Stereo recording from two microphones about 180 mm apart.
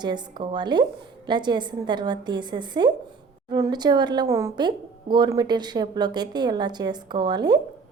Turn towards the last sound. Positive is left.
turn(degrees=-25)  # may be behind; listen again after turning